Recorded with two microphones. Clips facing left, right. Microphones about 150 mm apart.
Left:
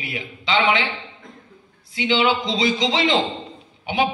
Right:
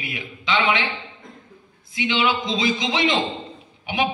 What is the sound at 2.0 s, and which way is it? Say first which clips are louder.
A man's voice: left 3 dB; 35° left (ahead or behind).